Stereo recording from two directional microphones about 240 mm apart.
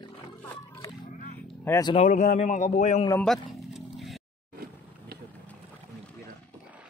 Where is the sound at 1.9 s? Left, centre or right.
Left.